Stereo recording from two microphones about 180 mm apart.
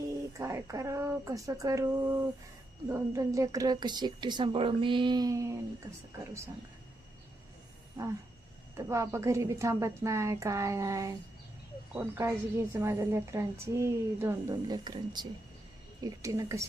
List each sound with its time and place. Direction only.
0.3 s a woman's voice: 15° right (ahead or behind)
8.9 s a woman's voice: 15° right (ahead or behind)